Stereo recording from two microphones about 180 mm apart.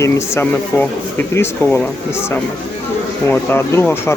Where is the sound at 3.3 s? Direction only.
10° left (ahead or behind).